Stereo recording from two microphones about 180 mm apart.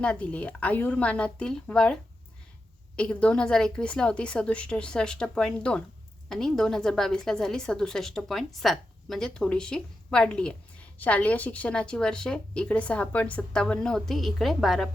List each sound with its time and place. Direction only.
0.0 s a woman's voice: 5° left (ahead or behind)